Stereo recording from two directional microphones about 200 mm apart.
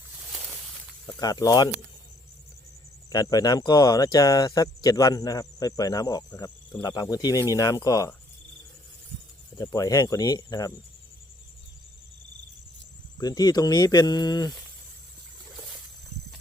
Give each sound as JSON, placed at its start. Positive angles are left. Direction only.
{"t": 0.3, "sound": "a sound", "side_deg": 0}
{"t": 1.0, "sound": "speech", "side_deg": 20}
{"t": 3.1, "sound": "speech", "side_deg": 20}
{"t": 9.6, "sound": "speech", "side_deg": 15}
{"t": 13.1, "sound": "speech", "side_deg": 20}